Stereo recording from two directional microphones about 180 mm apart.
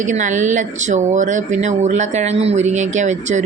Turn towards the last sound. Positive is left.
turn(degrees=-40)  # may be behind; listen again after turning